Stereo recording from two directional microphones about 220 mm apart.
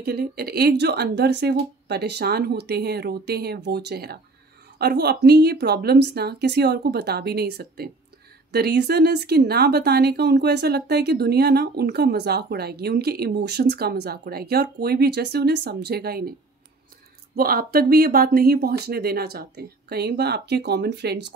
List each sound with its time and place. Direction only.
0.0 s speech: 45° right (ahead or behind)
17.4 s speech: 40° right (ahead or behind)